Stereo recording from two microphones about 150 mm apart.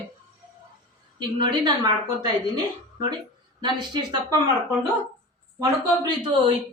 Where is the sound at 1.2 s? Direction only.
35° right (ahead or behind).